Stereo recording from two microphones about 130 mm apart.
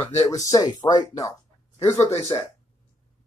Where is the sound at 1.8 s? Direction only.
55° left (ahead or behind).